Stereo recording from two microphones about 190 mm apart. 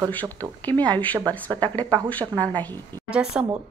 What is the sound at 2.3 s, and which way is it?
Speech, 20° right (ahead or behind).